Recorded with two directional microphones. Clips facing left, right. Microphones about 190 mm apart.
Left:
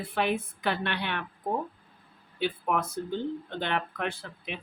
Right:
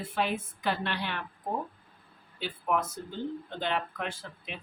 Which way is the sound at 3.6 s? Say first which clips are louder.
Even; 60° left (ahead or behind).